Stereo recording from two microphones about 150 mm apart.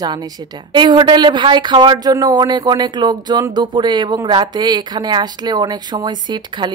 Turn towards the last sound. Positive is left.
turn(degrees=-30)  # may be behind; listen again after turning